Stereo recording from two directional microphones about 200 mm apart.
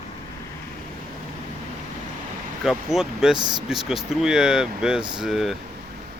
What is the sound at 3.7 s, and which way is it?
Speech, centre (ahead or behind).